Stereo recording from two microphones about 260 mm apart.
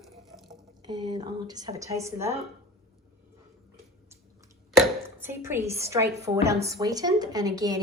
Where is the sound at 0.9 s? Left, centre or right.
Centre.